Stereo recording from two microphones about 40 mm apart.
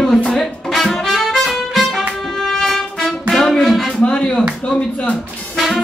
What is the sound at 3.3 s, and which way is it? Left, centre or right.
Music, centre.